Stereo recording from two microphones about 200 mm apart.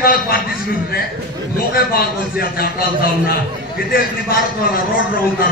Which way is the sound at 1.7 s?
50° left (ahead or behind).